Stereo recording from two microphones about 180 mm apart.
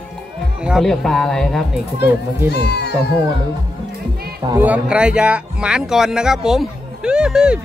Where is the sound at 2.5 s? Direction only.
65° left (ahead or behind).